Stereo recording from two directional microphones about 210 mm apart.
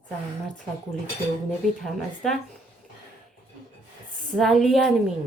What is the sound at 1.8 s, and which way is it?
Speech, centre (ahead or behind).